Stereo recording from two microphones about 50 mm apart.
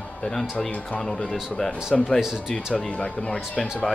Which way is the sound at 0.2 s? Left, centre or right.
Centre.